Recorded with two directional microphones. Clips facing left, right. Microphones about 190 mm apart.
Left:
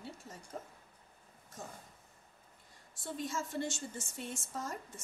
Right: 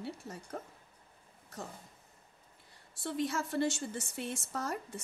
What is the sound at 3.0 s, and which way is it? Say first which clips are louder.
A woman's voice: right 5 dB; 70° right (ahead or behind).